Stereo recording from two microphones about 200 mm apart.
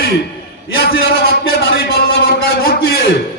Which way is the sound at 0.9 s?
50° left (ahead or behind).